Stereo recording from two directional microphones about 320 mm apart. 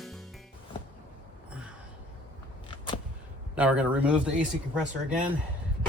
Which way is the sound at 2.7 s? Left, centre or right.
Centre.